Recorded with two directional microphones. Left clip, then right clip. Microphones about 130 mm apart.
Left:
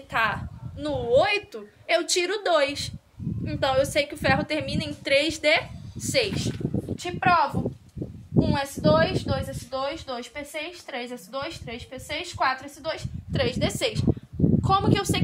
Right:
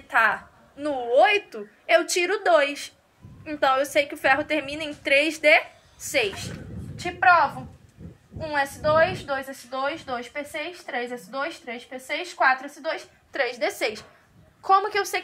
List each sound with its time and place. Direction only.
0.1 s a woman's voice: 40° left (ahead or behind)
8.5 s a woman's voice: 35° left (ahead or behind)